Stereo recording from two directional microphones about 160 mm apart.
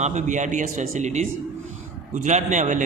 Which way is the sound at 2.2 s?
50° right (ahead or behind).